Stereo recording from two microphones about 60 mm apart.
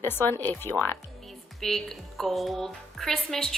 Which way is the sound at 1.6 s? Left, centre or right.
Centre.